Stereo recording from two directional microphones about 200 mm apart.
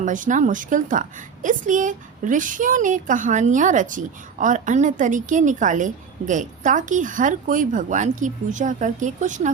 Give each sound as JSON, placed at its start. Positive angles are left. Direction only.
{"t": 0.0, "sound": "a woman's voice", "side_deg": -40}